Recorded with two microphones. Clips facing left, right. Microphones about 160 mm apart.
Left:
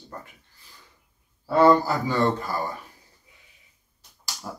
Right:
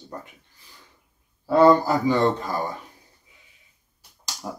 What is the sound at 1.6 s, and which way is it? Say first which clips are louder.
Speech: right 2 dB; 15° right (ahead or behind).